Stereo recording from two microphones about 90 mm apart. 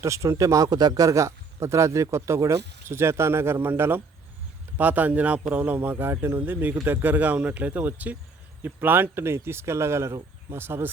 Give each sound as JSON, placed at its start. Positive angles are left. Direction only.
{"t": 0.0, "sound": "speech", "side_deg": -35}